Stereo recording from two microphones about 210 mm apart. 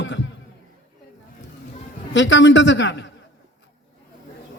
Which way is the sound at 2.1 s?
60° left (ahead or behind).